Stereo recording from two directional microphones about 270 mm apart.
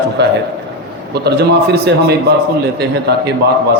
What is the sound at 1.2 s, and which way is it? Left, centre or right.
A man's voice, right.